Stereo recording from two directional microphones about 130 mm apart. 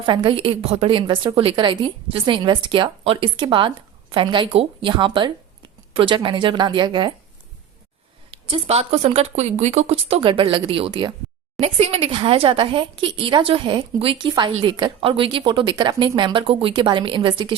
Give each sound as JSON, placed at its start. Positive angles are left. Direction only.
{"t": 0.0, "sound": "speech", "side_deg": -40}
{"t": 8.3, "sound": "speech", "side_deg": -45}
{"t": 11.6, "sound": "speech", "side_deg": -55}